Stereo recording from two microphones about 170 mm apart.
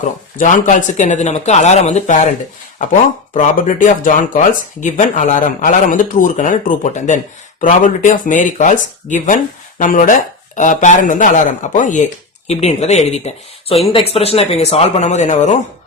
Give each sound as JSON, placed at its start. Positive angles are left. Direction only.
{"t": 0.0, "sound": "speech", "side_deg": 50}
{"t": 3.3, "sound": "speech", "side_deg": 50}